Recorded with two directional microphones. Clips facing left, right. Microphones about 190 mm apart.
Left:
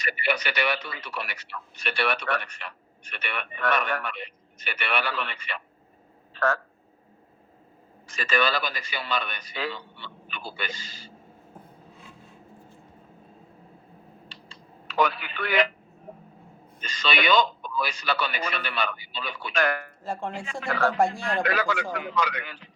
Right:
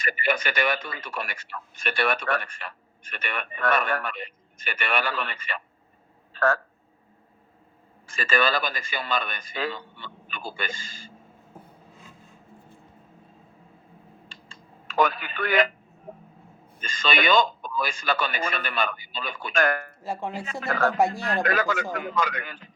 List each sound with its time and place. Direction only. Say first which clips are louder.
0.0 s speech: right 2 dB; 50° right (ahead or behind)
8.4 s speech: right 2 dB; 50° right (ahead or behind)
14.3 s telephone: left 1 dB; 50° right (ahead or behind)
16.8 s speech: right 1 dB; 50° right (ahead or behind)
20.1 s speech: right 1 dB; 5° right (ahead or behind)
20.4 s a man's voice: right 1 dB; 40° right (ahead or behind)